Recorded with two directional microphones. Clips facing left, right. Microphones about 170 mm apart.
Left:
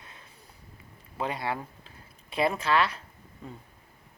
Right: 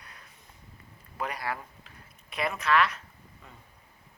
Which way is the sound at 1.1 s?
25° left (ahead or behind).